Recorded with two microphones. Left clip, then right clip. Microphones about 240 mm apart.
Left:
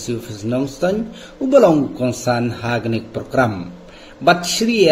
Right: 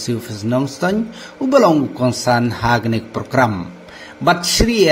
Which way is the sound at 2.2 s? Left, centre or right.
Right.